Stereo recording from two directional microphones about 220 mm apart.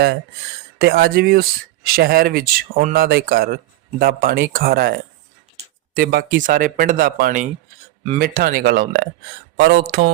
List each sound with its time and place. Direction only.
0.8 s speech: 45° right (ahead or behind)